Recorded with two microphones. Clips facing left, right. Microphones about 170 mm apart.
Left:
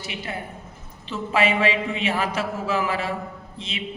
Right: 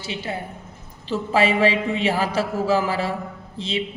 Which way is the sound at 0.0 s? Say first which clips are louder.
Right 3 dB; 30° right (ahead or behind).